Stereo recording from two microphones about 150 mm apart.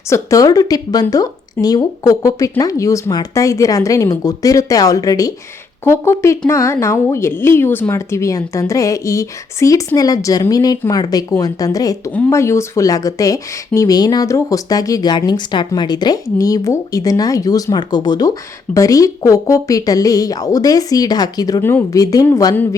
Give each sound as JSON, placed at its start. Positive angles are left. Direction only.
{"t": 0.1, "sound": "speech", "side_deg": 20}